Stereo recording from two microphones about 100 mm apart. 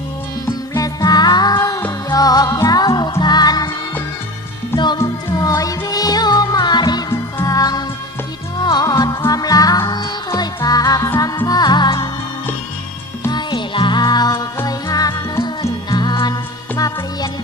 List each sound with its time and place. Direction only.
0.4 s music: 30° left (ahead or behind)
1.0 s music: 45° left (ahead or behind)
5.0 s music: 40° left (ahead or behind)
13.3 s music: 50° left (ahead or behind); by 15.7 s 35° left (ahead or behind)
15.9 s music: 45° left (ahead or behind)